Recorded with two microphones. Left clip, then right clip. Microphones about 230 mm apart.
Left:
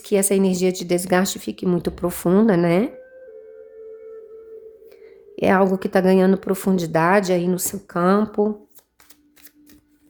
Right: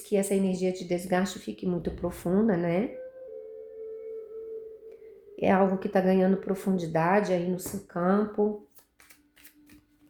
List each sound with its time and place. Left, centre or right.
0.0 s a woman's voice: left
5.4 s a woman's voice: left